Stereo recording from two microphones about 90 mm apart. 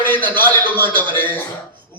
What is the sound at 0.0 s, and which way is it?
A man's voice, 20° left (ahead or behind).